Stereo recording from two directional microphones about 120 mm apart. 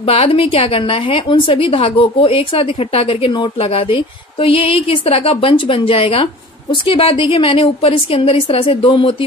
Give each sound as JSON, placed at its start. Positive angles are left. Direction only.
{"t": 0.0, "sound": "a woman's voice", "side_deg": 55}